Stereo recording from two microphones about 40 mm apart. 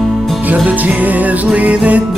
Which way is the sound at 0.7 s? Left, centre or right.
Right.